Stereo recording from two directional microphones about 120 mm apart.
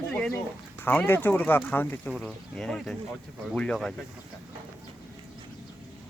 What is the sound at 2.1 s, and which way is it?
Speech, 5° left (ahead or behind).